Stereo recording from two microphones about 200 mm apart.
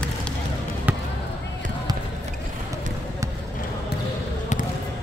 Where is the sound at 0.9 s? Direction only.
10° right (ahead or behind).